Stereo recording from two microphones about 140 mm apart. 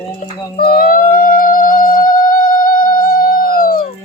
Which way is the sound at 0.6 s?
90° left.